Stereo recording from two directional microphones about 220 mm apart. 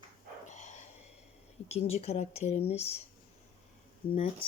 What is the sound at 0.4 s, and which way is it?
Dog, 30° left (ahead or behind).